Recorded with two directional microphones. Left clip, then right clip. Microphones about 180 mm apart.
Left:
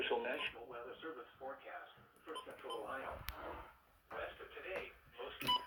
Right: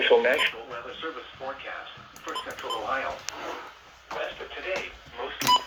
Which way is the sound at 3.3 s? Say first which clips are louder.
Right 14 dB; 90° left.